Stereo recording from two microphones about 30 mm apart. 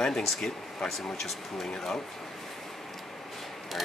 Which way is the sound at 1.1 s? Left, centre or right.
Centre.